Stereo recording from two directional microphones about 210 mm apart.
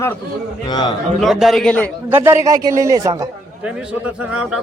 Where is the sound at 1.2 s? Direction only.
Centre (ahead or behind).